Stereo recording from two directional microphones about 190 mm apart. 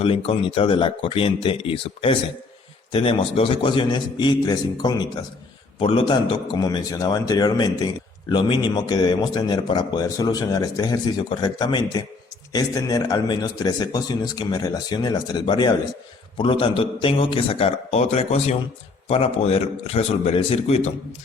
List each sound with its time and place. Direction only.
0.0 s a man's voice: 30° left (ahead or behind)